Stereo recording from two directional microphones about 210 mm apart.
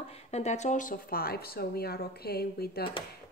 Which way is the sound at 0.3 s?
30° left (ahead or behind).